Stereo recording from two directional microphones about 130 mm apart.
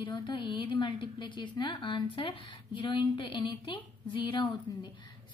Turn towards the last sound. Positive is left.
turn(degrees=35)  # may be behind; listen again after turning